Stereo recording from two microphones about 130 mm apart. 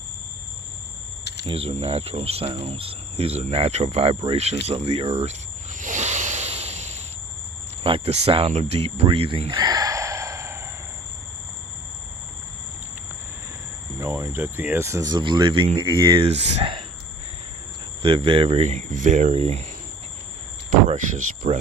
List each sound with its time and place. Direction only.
1.5 s speech: 45° right (ahead or behind)
8.7 s a sound: 50° right (ahead or behind); by 10.7 s 20° right (ahead or behind)
14.0 s speech: 25° right (ahead or behind); by 16.8 s 50° right (ahead or behind)
18.0 s speech: 45° right (ahead or behind); by 19.4 s 70° right (ahead or behind)
20.7 s speech: 70° right (ahead or behind)